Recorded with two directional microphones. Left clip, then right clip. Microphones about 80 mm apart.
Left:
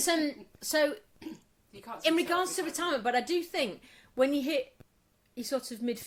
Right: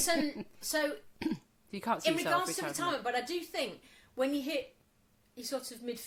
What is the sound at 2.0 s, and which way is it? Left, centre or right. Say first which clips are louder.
A woman's voice: left 5 dB; left.